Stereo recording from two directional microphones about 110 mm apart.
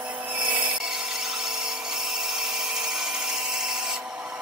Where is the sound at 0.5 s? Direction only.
10° right (ahead or behind).